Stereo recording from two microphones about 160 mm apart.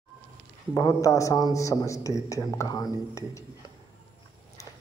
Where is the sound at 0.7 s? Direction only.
20° left (ahead or behind).